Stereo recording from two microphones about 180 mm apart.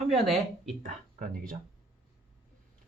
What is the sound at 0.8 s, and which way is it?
Speech, 50° right (ahead or behind).